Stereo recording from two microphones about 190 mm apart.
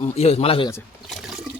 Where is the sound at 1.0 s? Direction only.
Centre (ahead or behind).